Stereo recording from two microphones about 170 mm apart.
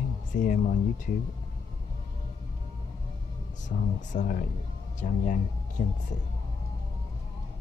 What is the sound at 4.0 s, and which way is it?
Speech, 50° left (ahead or behind).